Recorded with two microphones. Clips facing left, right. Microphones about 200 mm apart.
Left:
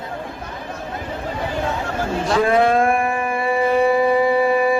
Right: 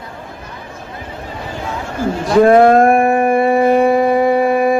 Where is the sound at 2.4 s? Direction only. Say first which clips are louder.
Right 9 dB; 50° right (ahead or behind).